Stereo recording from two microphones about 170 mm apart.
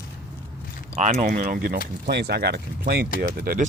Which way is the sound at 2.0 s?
75° right (ahead or behind).